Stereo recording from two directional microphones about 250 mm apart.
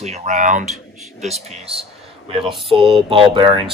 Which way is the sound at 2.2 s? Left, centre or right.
Centre.